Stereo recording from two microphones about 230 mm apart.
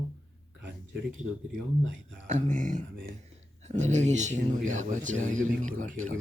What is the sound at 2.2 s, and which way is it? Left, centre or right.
Speech, right.